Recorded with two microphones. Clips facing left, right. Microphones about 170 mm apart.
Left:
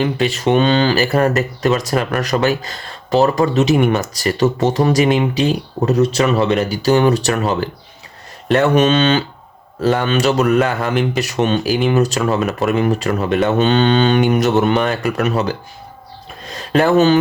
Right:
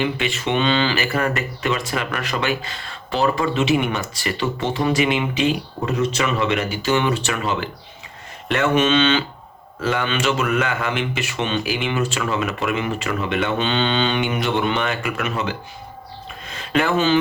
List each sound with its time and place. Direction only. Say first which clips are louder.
0.0 s speech: left 6 dB; 40° left (ahead or behind)